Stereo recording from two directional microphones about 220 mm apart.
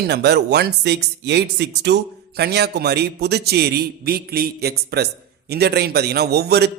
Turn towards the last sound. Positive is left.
turn(degrees=-45)  # may be behind; listen again after turning